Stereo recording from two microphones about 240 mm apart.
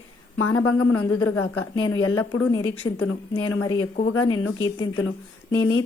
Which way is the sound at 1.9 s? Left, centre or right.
Left.